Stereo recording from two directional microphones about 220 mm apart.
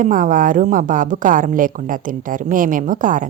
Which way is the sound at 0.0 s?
40° right (ahead or behind).